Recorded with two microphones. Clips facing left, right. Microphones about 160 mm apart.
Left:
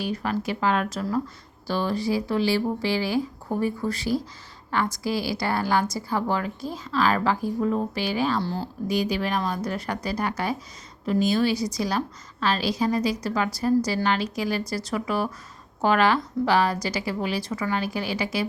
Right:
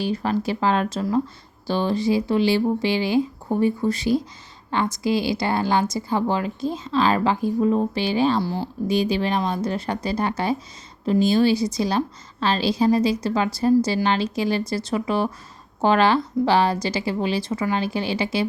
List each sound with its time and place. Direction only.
0.0 s a woman's voice: 30° right (ahead or behind)
8.4 s speech: 10° right (ahead or behind)
8.9 s a woman's voice: 25° right (ahead or behind)